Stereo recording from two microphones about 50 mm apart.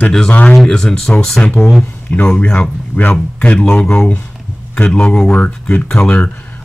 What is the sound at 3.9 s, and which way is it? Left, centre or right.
Speech, left.